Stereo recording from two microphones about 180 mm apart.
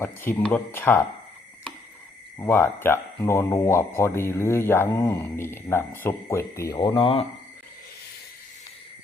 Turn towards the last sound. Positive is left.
turn(degrees=30)  # may be behind; listen again after turning